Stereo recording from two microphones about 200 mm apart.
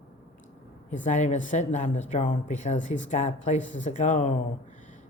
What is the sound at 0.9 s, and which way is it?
A woman's voice, 35° left (ahead or behind).